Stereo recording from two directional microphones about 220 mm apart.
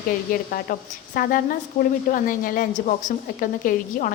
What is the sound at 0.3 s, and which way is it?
A woman's voice, 40° left (ahead or behind).